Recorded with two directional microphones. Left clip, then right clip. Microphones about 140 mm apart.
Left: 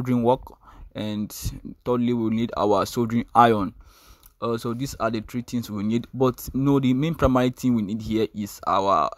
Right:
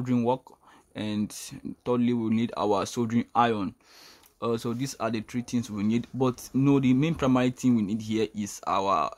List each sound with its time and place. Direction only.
0.0 s speech: 50° left (ahead or behind)
4.4 s speech: 30° left (ahead or behind)